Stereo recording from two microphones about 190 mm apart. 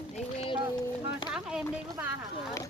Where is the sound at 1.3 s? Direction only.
5° right (ahead or behind).